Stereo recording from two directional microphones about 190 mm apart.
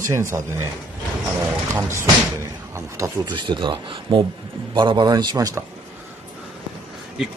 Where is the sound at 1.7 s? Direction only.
15° right (ahead or behind).